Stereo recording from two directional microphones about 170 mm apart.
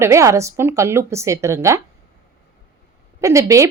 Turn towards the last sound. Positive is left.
turn(degrees=-15)  # may be behind; listen again after turning